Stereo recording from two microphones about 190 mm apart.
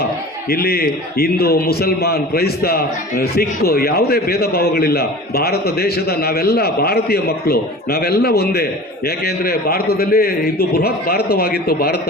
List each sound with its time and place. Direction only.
0.5 s a man's voice: 55° left (ahead or behind)